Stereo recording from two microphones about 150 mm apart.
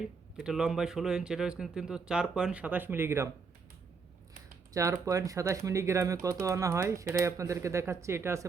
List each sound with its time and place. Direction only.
0.3 s speech: 5° right (ahead or behind)
4.7 s speech: 20° right (ahead or behind)